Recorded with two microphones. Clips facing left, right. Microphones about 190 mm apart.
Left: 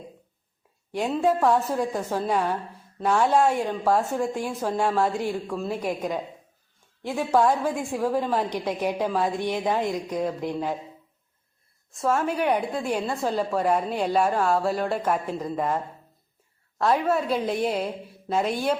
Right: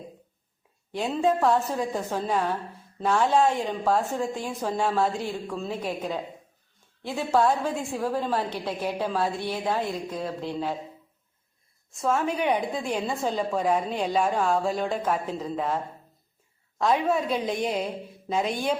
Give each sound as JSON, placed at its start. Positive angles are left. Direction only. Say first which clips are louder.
{"t": 0.9, "sound": "a woman's voice", "louder": "left 1 dB", "side_deg": 10}
{"t": 11.9, "sound": "a woman's voice", "louder": "left 1 dB", "side_deg": 5}